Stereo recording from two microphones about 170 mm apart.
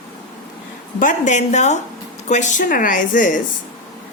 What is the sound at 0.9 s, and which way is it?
A woman's voice, 50° left (ahead or behind).